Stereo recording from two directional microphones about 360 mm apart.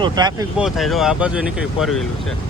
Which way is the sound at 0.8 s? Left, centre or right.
Centre.